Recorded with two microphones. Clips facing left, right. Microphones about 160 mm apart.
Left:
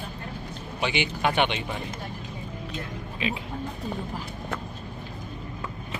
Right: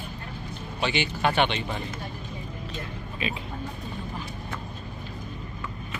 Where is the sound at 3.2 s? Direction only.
15° left (ahead or behind).